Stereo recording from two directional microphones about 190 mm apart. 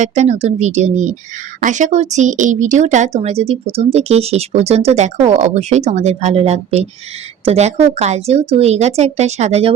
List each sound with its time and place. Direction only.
0.0 s speech: 40° right (ahead or behind)